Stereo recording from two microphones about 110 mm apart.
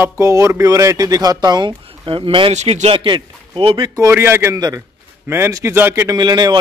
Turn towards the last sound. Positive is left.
turn(degrees=-40)  # may be behind; listen again after turning